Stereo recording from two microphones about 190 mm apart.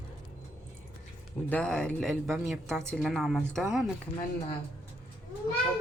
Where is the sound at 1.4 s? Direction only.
5° left (ahead or behind).